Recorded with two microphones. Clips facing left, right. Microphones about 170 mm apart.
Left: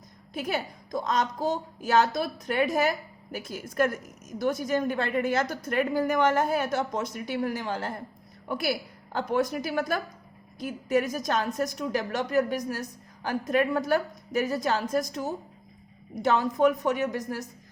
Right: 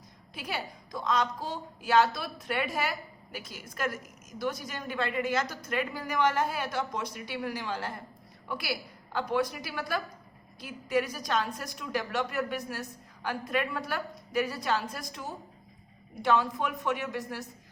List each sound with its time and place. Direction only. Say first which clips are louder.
0.3 s a woman's voice: left 6 dB; 45° left (ahead or behind)